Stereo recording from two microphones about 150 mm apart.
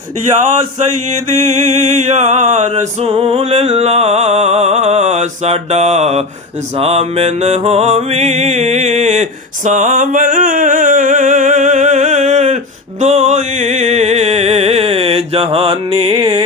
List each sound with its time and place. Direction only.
1.1 s music: 50° right (ahead or behind); by 16.4 s 35° right (ahead or behind)